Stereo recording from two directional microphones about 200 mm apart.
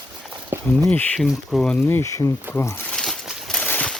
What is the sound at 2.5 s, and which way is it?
Crumpling, 10° left (ahead or behind).